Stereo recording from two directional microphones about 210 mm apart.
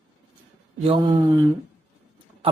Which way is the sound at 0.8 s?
20° right (ahead or behind).